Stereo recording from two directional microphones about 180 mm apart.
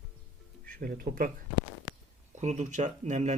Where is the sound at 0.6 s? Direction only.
50° right (ahead or behind).